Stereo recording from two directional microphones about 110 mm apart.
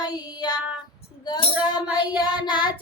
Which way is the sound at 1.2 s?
40° left (ahead or behind).